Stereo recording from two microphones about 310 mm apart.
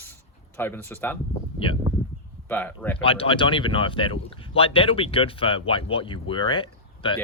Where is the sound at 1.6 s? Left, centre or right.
Centre.